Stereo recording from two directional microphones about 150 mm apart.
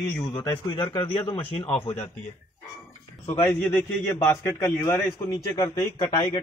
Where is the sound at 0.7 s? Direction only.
35° left (ahead or behind).